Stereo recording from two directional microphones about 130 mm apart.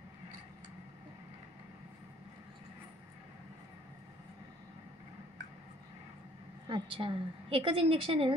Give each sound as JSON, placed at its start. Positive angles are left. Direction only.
{"t": 6.7, "sound": "a woman's voice", "side_deg": -40}